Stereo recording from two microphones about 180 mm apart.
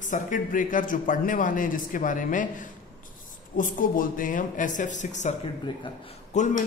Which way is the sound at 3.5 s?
50° left (ahead or behind).